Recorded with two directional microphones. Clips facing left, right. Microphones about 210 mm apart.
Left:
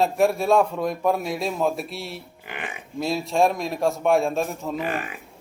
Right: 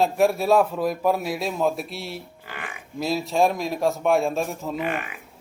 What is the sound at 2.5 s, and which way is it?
Livestock, 20° left (ahead or behind).